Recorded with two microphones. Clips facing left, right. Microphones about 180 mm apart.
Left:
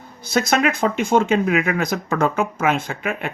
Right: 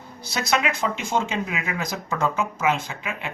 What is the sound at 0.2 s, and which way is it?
Speech, 50° left (ahead or behind).